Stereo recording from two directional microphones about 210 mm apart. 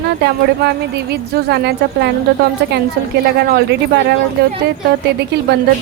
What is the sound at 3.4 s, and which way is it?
Speech, 50° right (ahead or behind).